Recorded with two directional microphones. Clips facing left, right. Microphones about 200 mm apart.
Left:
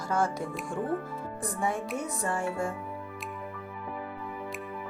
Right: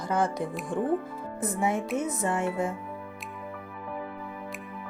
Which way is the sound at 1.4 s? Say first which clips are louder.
Right 4 dB; 20° right (ahead or behind).